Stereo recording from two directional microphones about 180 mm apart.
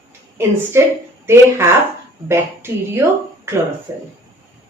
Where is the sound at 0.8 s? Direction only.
15° right (ahead or behind).